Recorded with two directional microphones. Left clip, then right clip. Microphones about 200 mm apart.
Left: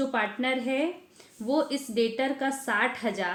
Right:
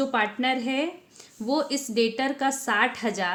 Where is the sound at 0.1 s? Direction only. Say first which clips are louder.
Right 3 dB; 45° right (ahead or behind).